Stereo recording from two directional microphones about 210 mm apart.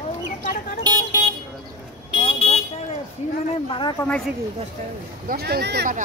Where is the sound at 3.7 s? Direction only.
20° left (ahead or behind).